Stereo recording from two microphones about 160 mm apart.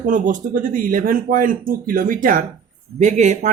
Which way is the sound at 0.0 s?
55° right (ahead or behind).